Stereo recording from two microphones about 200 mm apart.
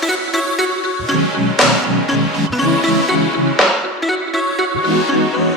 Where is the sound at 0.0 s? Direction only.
Centre (ahead or behind).